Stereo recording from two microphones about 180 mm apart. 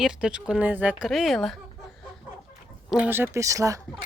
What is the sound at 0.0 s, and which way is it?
Speech, 5° right (ahead or behind).